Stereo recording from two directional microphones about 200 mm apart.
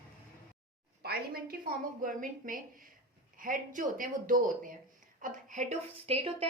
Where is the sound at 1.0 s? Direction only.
50° right (ahead or behind).